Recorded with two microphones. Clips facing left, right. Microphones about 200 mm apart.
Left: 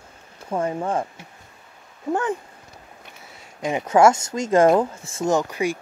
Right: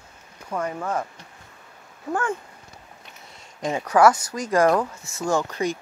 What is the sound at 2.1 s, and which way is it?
Speech, 20° left (ahead or behind).